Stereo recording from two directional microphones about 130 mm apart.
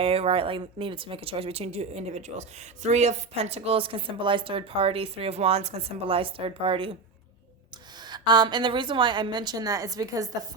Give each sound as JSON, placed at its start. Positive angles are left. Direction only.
{"t": 0.0, "sound": "a woman's voice", "side_deg": -50}
{"t": 8.0, "sound": "a woman's voice", "side_deg": -35}